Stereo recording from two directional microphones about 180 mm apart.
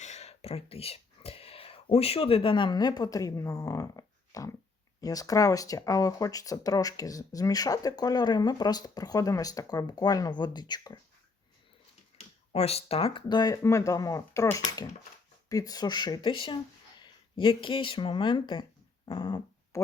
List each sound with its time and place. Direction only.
0.0 s speech: 40° left (ahead or behind); by 11.0 s 20° left (ahead or behind)
12.1 s speech: 35° left (ahead or behind)